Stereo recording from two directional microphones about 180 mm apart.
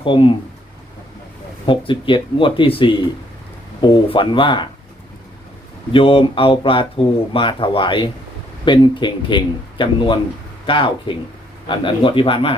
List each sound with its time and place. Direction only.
0.0 s speech: 30° left (ahead or behind)
1.6 s speech: 25° left (ahead or behind)
5.9 s speech: 30° left (ahead or behind)